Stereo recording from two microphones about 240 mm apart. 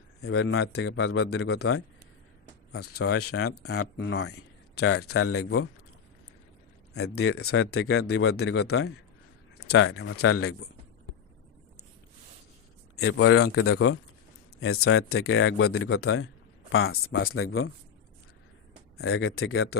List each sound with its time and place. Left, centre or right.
0.2 s a man's voice: left
3.1 s speech: left
4.1 s a man's voice: left
4.8 s speech: left
7.3 s speech: left
9.7 s speech: left
13.0 s speech: left
18.9 s speech: left